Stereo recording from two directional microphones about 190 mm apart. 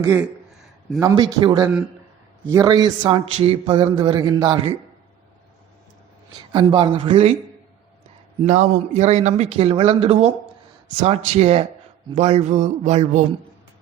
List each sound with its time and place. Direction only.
0.0 s a man's voice: 15° right (ahead or behind)
6.5 s a man's voice: 25° right (ahead or behind)
8.4 s a man's voice: 40° right (ahead or behind)